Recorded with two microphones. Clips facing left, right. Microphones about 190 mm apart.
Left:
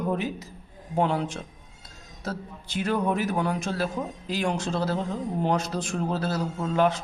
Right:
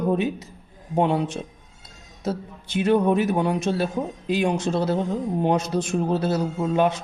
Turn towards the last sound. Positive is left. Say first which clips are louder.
# right 3 dB
turn(degrees=-20)  # may be behind; listen again after turning